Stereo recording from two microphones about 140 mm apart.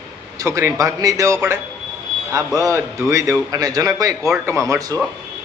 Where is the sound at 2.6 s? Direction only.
20° right (ahead or behind).